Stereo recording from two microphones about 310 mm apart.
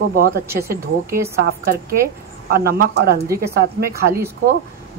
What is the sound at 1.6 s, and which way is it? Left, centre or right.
Speech, right.